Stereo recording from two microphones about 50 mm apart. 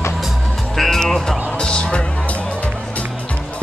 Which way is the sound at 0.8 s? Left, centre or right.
Centre.